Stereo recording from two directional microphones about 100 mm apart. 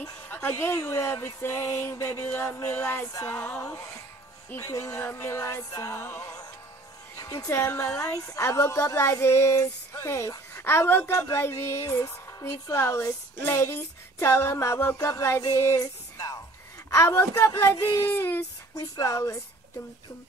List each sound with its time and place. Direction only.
0.3 s a woman's voice: 20° left (ahead or behind)
18.8 s speech: 35° left (ahead or behind)